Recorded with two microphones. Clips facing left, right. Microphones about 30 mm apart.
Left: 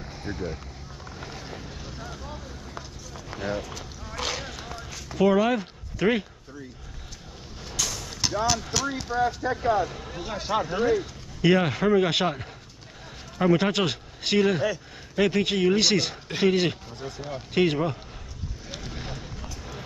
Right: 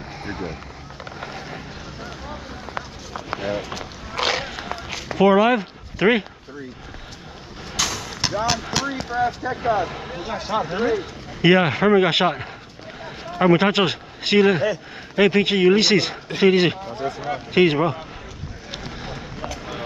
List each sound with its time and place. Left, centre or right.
0.2 s speech: right
2.0 s run: right
3.3 s run: right
3.6 s a sound: right
4.8 s run: right
5.2 s speech: right
7.7 s vehicle: right
8.1 s vehicle: right
8.7 s speech: right
18.7 s boat: right
19.1 s a sound: right